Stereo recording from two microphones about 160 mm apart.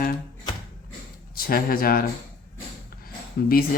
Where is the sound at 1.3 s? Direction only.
65° left (ahead or behind).